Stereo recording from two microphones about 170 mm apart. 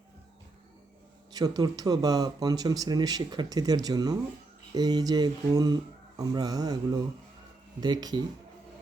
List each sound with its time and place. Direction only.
1.3 s speech: 20° right (ahead or behind)